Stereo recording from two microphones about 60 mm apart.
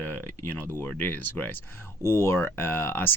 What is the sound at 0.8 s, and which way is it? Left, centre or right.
Speech, left.